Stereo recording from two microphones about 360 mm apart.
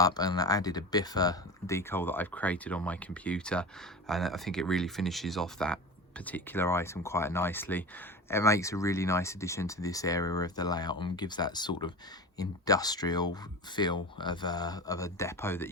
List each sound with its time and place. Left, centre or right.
0.0 s speech: centre